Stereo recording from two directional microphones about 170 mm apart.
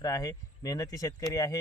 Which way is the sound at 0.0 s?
20° left (ahead or behind).